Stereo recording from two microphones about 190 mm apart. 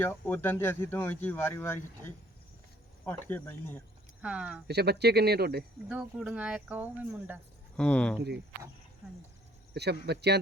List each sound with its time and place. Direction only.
0.0 s speech: 10° left (ahead or behind)
3.0 s speech: 10° left (ahead or behind)
4.2 s speech: 5° right (ahead or behind)
4.7 s speech: 60° right (ahead or behind)
5.9 s speech: 5° right (ahead or behind)
7.8 s speech: 5° left (ahead or behind)
9.7 s speech: 60° right (ahead or behind)